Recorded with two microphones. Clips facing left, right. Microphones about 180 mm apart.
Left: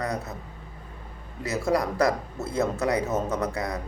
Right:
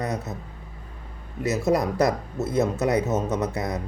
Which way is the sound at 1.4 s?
20° right (ahead or behind).